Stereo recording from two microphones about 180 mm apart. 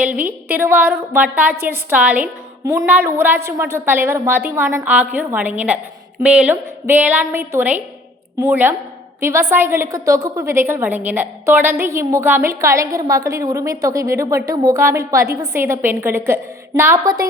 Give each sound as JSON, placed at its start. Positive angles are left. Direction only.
{"t": 0.0, "sound": "a woman's voice", "side_deg": -10}